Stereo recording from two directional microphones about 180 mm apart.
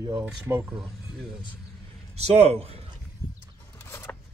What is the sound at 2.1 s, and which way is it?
Speech, 35° right (ahead or behind).